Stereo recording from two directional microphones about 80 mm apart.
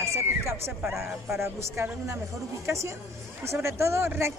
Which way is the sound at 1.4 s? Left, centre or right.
Right.